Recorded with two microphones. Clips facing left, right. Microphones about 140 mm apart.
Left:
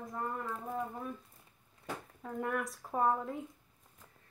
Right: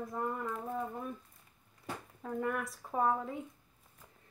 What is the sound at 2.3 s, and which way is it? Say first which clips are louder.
Speech: even; centre (ahead or behind).